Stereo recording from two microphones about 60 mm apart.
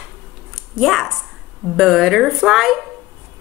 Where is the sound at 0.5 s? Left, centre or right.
Centre.